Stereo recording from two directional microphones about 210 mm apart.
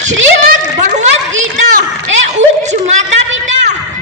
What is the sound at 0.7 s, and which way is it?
Children playing, 35° right (ahead or behind).